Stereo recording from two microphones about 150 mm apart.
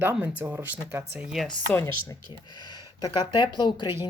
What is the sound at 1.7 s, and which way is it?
Speech, 15° left (ahead or behind).